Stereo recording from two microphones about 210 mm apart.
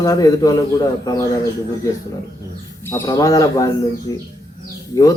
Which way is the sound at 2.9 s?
15° left (ahead or behind).